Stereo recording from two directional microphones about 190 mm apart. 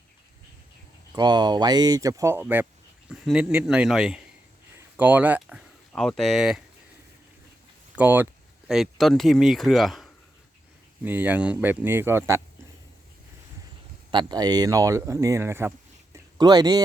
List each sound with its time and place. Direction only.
1.1 s a man's voice: 20° right (ahead or behind); by 6.6 s centre (ahead or behind)
7.9 s speech: 10° right (ahead or behind)
14.1 s speech: 25° right (ahead or behind)
16.1 s a sound: 20° right (ahead or behind)